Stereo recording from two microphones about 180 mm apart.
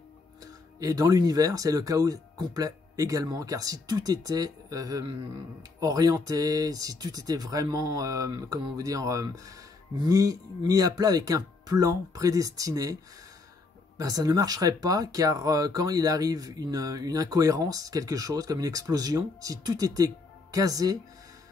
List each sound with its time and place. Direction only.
0.4 s speech: 20° right (ahead or behind)
13.9 s speech: 20° right (ahead or behind)